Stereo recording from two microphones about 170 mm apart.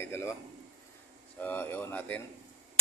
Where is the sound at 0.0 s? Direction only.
15° left (ahead or behind).